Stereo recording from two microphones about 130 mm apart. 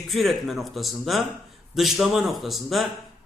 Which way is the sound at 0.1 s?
Centre (ahead or behind).